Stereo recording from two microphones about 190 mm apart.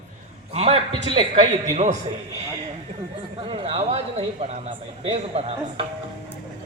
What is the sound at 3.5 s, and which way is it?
A man's voice, 35° right (ahead or behind).